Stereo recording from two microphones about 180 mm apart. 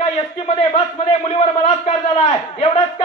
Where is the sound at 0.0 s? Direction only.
35° left (ahead or behind).